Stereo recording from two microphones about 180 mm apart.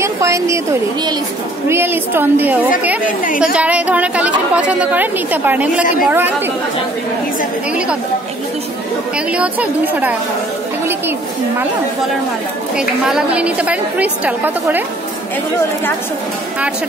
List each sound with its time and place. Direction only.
0.0 s a woman's voice: 15° right (ahead or behind)
1.7 s a woman's voice: 10° right (ahead or behind)
9.3 s a woman's voice: 10° right (ahead or behind)
10.9 s a sound: 10° right (ahead or behind)
12.7 s a woman's voice: 5° right (ahead or behind)